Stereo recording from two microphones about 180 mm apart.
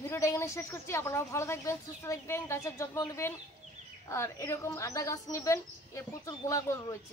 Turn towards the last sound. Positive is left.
turn(degrees=15)  # may be behind; listen again after turning